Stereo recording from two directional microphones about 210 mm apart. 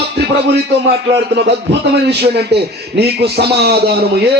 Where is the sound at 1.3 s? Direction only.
55° right (ahead or behind).